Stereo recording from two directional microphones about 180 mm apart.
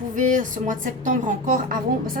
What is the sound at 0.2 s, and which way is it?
A woman's voice, 45° right (ahead or behind).